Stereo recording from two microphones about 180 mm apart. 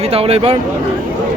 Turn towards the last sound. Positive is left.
turn(degrees=-35)  # may be behind; listen again after turning